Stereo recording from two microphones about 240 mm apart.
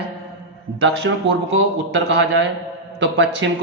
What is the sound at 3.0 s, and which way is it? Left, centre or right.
Speech, right.